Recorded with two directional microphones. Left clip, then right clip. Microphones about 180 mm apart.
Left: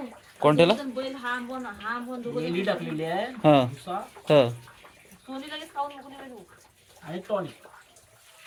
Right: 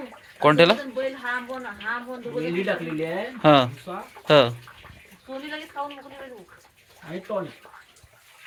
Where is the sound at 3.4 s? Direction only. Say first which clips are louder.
Right 3 dB; 10° left (ahead or behind).